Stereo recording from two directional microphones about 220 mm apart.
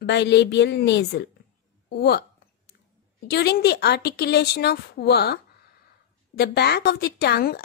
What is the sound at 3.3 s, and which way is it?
A woman's voice, 50° left (ahead or behind).